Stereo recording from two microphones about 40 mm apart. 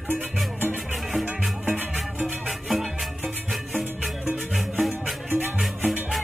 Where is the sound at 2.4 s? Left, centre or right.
Centre.